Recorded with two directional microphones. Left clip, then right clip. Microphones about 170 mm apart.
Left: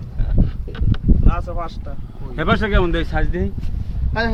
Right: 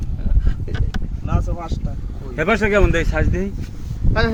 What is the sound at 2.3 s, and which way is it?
Speech, 10° left (ahead or behind).